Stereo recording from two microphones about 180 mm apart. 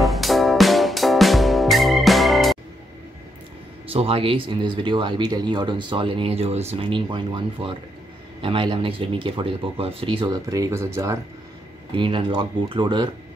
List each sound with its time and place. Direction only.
0.0 s music: centre (ahead or behind)
3.8 s speech: 30° right (ahead or behind); by 11.1 s 15° right (ahead or behind)
11.9 s speech: 30° right (ahead or behind)